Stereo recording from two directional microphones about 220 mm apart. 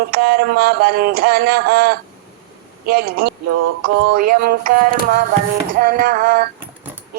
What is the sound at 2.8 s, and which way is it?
Speech, 45° right (ahead or behind).